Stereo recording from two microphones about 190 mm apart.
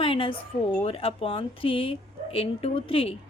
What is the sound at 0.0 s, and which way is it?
A woman's voice, 25° left (ahead or behind).